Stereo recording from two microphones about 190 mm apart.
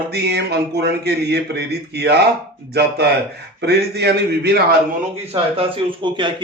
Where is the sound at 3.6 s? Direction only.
60° right (ahead or behind).